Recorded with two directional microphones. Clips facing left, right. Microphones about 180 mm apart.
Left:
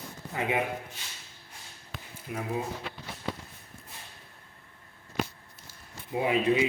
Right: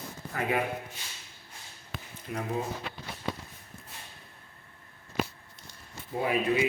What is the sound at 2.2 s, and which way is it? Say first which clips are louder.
Speech: even; 5° left (ahead or behind).